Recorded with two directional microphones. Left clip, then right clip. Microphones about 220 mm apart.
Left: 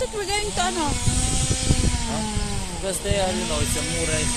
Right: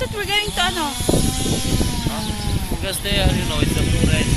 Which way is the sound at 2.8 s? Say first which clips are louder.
Right 2 dB; 20° left (ahead or behind).